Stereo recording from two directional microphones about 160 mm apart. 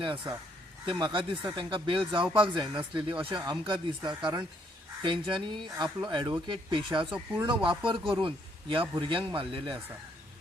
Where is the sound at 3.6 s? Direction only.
30° right (ahead or behind).